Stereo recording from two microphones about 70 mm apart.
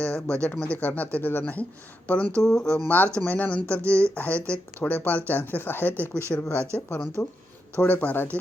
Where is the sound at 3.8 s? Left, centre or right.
Right.